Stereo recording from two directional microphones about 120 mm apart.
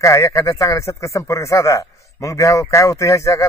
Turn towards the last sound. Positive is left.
turn(degrees=25)  # may be behind; listen again after turning